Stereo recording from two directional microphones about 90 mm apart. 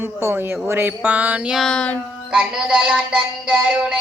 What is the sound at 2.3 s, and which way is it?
Mantra, 10° right (ahead or behind).